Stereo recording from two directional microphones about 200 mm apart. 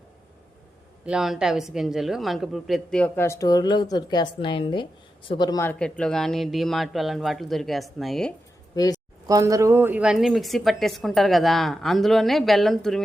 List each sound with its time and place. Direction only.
1.0 s speech: 5° right (ahead or behind); by 5.7 s 15° left (ahead or behind)
5.8 s speech: 5° left (ahead or behind)
8.7 s speech: 20° left (ahead or behind)
9.2 s speech: 15° right (ahead or behind); by 13.0 s centre (ahead or behind)